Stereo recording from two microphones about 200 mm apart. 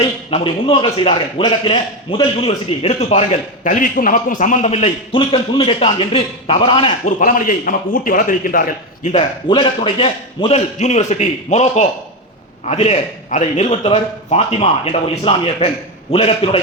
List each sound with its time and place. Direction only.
0.0 s a man's voice: 30° left (ahead or behind)
7.2 s a man's voice: 40° left (ahead or behind)
9.1 s a man's voice: 25° left (ahead or behind)